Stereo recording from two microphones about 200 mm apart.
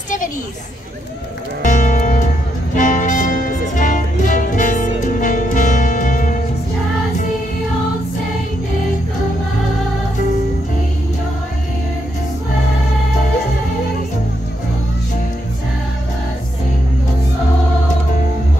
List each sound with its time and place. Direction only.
1.6 s music: 40° left (ahead or behind)